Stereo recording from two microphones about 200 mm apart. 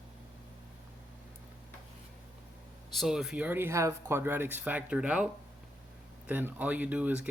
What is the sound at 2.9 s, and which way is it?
Speech, centre (ahead or behind).